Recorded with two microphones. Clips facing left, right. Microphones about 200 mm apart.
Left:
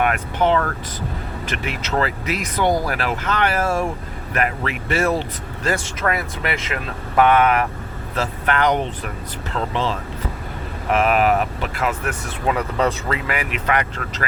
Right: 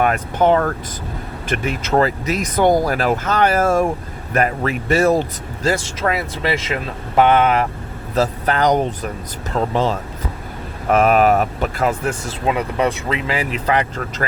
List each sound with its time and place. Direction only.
0.0 s speech: 40° right (ahead or behind)
5.6 s speech: 25° right (ahead or behind)
8.1 s speech: 35° right (ahead or behind)
12.5 s speech: 15° right (ahead or behind); by 14.3 s 35° right (ahead or behind)